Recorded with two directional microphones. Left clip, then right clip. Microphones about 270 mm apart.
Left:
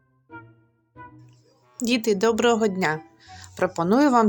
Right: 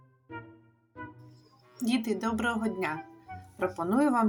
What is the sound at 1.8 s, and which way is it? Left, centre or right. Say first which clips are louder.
Speech: left 9 dB; left.